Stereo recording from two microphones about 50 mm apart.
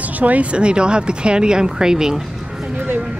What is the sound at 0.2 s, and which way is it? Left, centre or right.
Speech, right.